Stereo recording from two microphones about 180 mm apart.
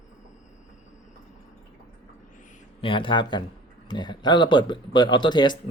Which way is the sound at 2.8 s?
30° left (ahead or behind).